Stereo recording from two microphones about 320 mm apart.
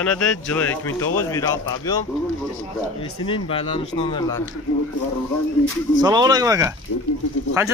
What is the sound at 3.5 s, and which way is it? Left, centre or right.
Speech, centre.